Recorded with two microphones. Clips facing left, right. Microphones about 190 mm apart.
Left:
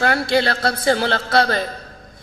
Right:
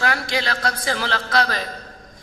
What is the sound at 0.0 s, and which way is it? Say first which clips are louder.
A man's voice: left 6 dB; 35° left (ahead or behind).